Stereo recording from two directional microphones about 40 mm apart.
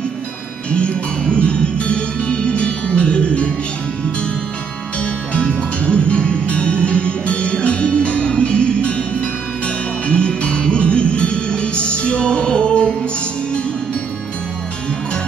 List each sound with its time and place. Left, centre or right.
0.7 s music: left
5.0 s music: left